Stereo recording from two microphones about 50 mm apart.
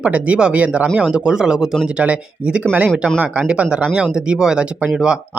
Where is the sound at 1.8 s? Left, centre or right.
Right.